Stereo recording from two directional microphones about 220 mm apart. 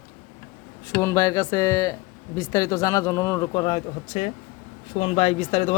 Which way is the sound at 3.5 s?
25° left (ahead or behind).